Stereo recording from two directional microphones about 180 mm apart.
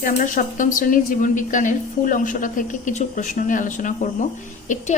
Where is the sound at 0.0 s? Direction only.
50° left (ahead or behind).